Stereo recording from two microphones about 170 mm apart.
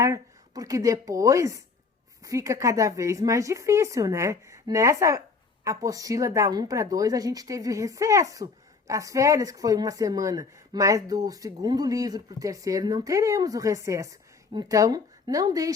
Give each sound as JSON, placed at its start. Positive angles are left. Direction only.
{"t": 0.0, "sound": "a woman's voice", "side_deg": -20}